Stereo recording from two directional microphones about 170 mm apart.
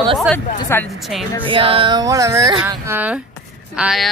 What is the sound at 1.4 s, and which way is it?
Speech, 30° right (ahead or behind).